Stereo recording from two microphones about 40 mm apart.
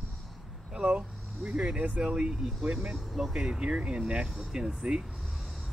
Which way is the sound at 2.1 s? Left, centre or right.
Right.